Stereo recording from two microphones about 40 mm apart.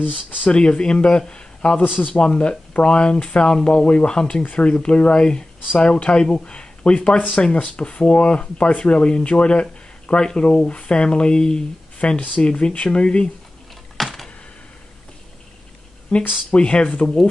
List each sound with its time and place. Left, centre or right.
0.0 s speech: left
0.5 s speech: left
1.8 s speech: left
2.1 s speech: left
13.9 s computer keyboard: centre
16.4 s speech: left